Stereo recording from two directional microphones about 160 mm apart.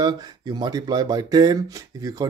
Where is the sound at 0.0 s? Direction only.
25° right (ahead or behind).